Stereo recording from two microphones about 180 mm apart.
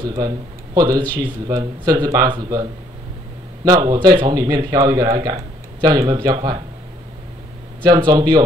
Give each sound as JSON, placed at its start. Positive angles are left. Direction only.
{"t": 0.0, "sound": "speech", "side_deg": -20}
{"t": 7.8, "sound": "speech", "side_deg": -25}